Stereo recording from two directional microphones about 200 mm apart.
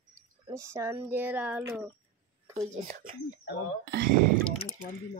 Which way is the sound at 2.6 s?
35° right (ahead or behind).